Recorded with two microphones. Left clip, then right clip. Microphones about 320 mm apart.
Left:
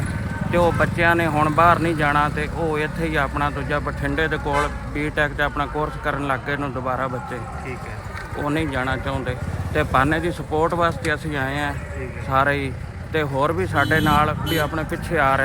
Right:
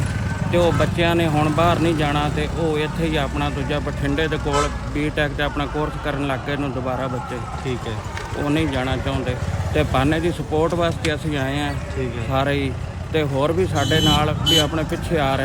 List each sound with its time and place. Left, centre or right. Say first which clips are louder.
0.5 s speech: even; centre
8.4 s speech: right 1 dB; centre